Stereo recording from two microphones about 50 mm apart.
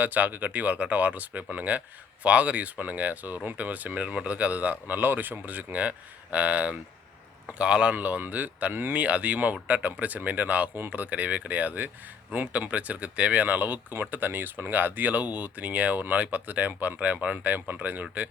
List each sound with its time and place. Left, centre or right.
0.0 s speech: right
7.9 s speech: right
8.7 s speech: right
9.0 s speech: right